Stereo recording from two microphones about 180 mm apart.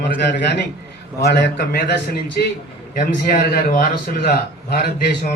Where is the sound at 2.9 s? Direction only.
50° left (ahead or behind).